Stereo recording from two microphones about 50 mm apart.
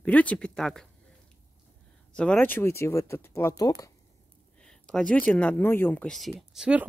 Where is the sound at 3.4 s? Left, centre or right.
Left.